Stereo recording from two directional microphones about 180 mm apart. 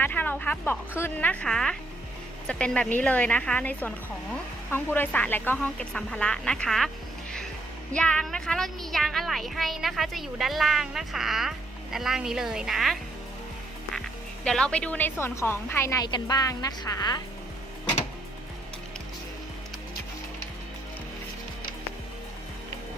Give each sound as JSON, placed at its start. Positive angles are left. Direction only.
{"t": 0.0, "sound": "a woman's voice", "side_deg": 10}
{"t": 7.9, "sound": "a child's voice", "side_deg": 5}
{"t": 14.4, "sound": "a woman's voice", "side_deg": 5}